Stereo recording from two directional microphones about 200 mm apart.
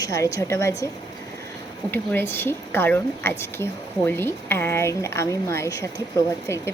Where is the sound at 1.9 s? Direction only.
10° left (ahead or behind).